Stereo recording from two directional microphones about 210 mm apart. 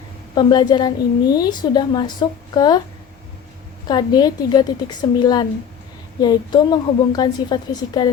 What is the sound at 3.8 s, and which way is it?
A woman's voice, 20° left (ahead or behind).